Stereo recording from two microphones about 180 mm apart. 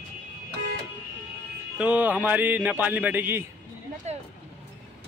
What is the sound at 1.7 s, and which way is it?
A man's voice, 5° right (ahead or behind).